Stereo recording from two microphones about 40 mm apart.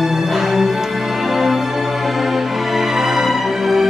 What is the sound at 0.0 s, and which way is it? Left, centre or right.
Music, centre.